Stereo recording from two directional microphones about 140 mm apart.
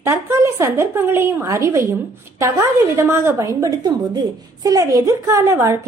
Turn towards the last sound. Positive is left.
turn(degrees=-20)  # may be behind; listen again after turning